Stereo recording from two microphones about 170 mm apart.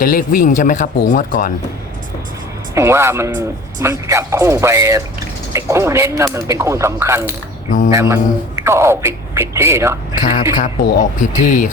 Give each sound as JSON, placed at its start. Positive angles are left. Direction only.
{"t": 0.0, "sound": "speech", "side_deg": 55}
{"t": 2.7, "sound": "a man's voice", "side_deg": -15}
{"t": 10.6, "sound": "speech", "side_deg": 50}